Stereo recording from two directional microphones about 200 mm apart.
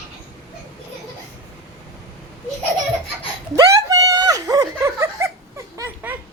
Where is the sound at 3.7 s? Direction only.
15° right (ahead or behind).